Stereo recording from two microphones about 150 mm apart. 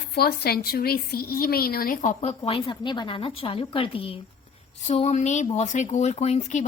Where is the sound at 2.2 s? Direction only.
35° left (ahead or behind).